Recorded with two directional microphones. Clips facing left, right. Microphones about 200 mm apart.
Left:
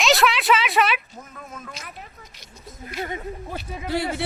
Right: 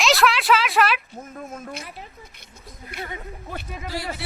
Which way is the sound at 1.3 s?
45° right (ahead or behind).